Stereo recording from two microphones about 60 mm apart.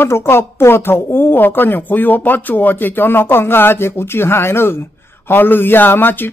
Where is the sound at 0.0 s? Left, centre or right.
Left.